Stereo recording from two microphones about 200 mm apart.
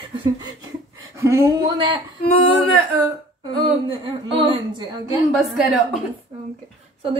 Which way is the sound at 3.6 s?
25° right (ahead or behind).